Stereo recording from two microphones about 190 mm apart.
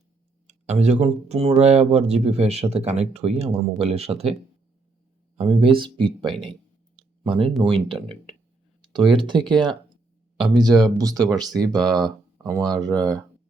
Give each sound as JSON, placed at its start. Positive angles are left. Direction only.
{"t": 0.4, "sound": "speech", "side_deg": -35}
{"t": 5.4, "sound": "speech", "side_deg": -30}
{"t": 6.9, "sound": "a sound", "side_deg": -30}
{"t": 7.6, "sound": "speech", "side_deg": -25}
{"t": 10.3, "sound": "speech", "side_deg": -5}
{"t": 10.6, "sound": "speech", "side_deg": -20}